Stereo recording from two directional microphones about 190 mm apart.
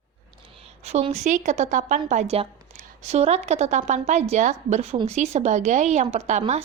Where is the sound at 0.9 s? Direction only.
35° right (ahead or behind).